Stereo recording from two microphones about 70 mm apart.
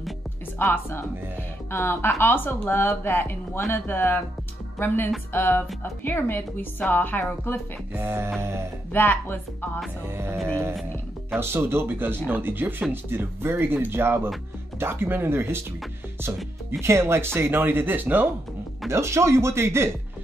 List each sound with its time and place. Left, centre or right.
0.6 s speech: left
8.0 s speech: right
8.9 s speech: left
10.0 s speech: right
16.8 s speech: right
18.9 s speech: right